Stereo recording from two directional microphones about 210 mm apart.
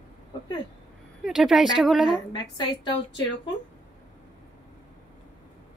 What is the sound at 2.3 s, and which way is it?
Speech, 20° left (ahead or behind).